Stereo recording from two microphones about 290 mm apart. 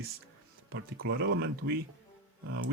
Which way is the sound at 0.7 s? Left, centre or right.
Right.